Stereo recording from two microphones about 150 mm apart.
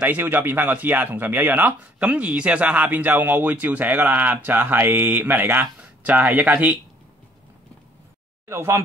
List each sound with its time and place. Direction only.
0.0 s speech: 10° right (ahead or behind)
8.5 s speech: 20° right (ahead or behind)